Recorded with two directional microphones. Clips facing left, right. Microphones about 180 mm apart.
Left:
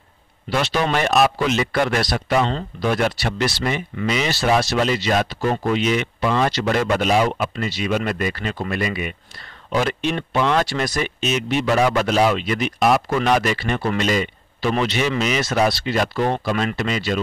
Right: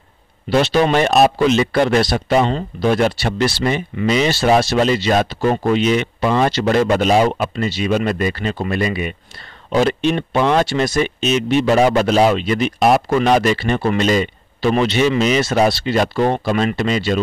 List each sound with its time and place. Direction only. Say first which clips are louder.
0.5 s speech: right 6 dB; 30° right (ahead or behind)